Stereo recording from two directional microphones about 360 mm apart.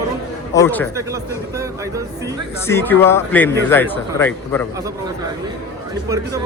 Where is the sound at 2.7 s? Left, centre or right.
Centre.